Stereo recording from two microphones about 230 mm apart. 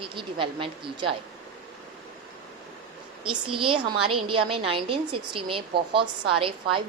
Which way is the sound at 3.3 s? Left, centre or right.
Right.